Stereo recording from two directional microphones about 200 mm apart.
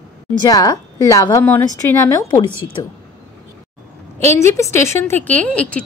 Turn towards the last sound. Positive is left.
turn(degrees=5)  # may be behind; listen again after turning